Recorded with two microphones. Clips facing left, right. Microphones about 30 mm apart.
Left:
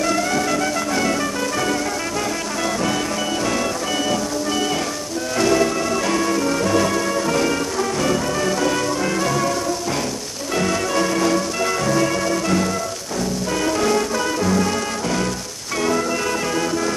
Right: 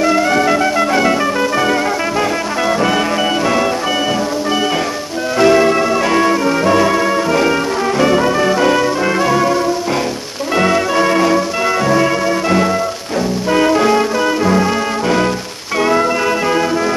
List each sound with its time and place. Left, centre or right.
0.0 s music: right
5.4 s music: right